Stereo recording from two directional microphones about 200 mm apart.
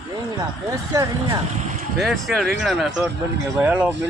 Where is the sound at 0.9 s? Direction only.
15° right (ahead or behind).